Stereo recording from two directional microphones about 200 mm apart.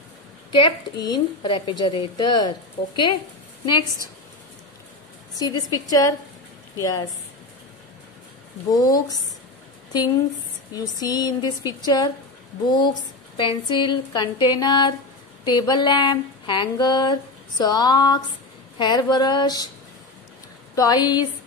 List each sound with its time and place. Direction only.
0.5 s speech: 20° left (ahead or behind)
5.4 s a woman's voice: 20° left (ahead or behind)
8.7 s speech: 20° left (ahead or behind)
10.7 s speech: 20° left (ahead or behind)
20.7 s speech: 20° left (ahead or behind)